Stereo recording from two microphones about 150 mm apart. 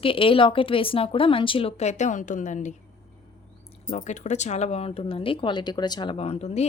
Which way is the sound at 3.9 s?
55° left (ahead or behind).